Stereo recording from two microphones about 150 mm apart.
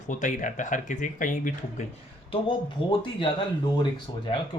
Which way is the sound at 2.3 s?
35° left (ahead or behind).